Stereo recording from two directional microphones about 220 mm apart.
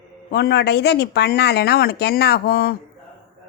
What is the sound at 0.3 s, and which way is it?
A woman's voice, 50° left (ahead or behind).